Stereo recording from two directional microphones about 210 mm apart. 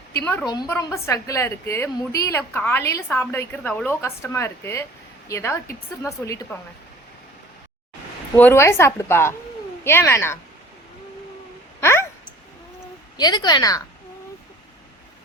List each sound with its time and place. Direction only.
0.2 s a woman's voice: 10° left (ahead or behind)
8.4 s a woman's voice: 10° left (ahead or behind)
11.8 s a sound: 10° left (ahead or behind)
13.1 s a woman's voice: 20° left (ahead or behind)